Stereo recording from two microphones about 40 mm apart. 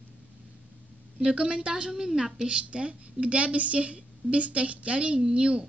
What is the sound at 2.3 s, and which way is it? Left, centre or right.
A woman's voice, right.